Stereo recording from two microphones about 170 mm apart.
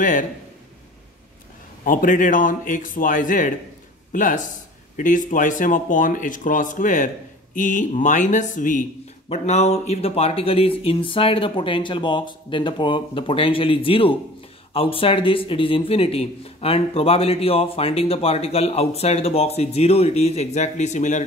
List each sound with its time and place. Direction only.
1.9 s speech: 50° left (ahead or behind)